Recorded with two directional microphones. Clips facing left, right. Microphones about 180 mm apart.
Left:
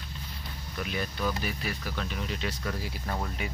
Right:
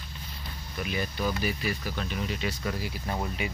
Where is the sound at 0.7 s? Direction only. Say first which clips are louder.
Right 2 dB; 5° right (ahead or behind).